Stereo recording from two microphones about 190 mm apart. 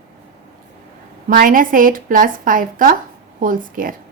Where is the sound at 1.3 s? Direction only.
50° right (ahead or behind).